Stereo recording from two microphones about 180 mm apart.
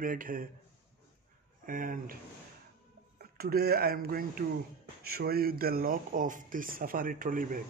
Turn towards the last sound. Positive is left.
turn(degrees=-50)  # may be behind; listen again after turning